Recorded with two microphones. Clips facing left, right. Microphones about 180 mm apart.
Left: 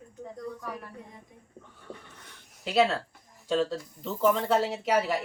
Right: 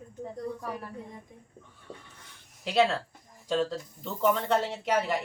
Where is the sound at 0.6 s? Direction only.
30° right (ahead or behind).